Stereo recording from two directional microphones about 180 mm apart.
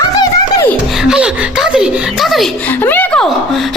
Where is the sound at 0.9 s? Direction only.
5° right (ahead or behind).